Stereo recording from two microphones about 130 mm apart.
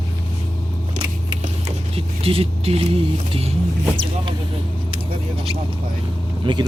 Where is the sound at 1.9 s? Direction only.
45° right (ahead or behind).